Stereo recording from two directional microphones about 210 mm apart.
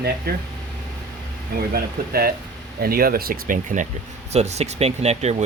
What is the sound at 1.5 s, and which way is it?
Speech, 45° right (ahead or behind).